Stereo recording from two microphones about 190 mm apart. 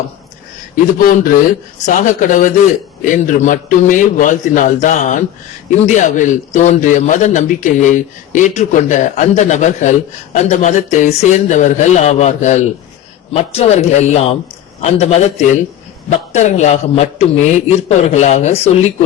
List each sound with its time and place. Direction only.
0.9 s a man's voice: 45° left (ahead or behind)